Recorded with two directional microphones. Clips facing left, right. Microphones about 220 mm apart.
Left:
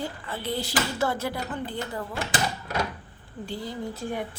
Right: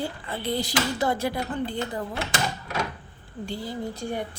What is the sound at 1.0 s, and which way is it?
Speech, 15° right (ahead or behind).